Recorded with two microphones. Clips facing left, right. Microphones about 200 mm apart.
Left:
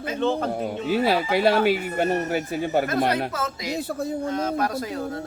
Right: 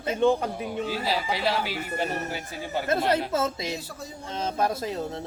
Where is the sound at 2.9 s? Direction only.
25° right (ahead or behind).